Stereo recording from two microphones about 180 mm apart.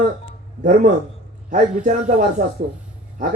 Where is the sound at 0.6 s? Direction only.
45° right (ahead or behind).